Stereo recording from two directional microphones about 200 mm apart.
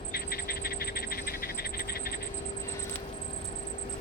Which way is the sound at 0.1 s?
50° left (ahead or behind).